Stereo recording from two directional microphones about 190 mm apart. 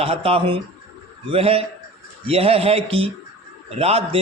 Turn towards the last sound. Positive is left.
turn(degrees=-30)  # may be behind; listen again after turning